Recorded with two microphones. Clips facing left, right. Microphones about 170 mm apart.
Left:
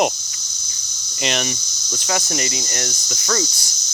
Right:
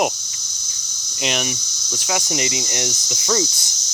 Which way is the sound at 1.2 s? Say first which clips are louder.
Left 1 dB; 5° right (ahead or behind).